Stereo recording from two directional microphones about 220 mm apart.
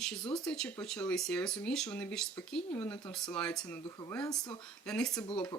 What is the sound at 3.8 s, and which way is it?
Speech, 15° left (ahead or behind).